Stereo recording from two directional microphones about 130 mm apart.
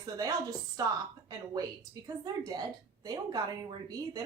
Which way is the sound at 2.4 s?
30° right (ahead or behind).